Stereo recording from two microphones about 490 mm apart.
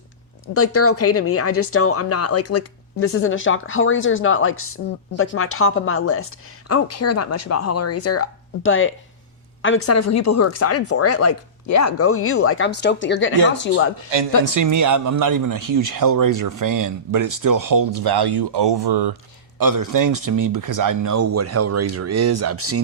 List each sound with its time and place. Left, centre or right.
0.4 s speech: left
14.1 s speech: right
14.4 s speech: right
19.5 s speech: right